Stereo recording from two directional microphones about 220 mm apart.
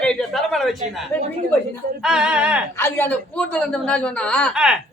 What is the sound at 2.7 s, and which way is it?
A man's voice, 10° left (ahead or behind).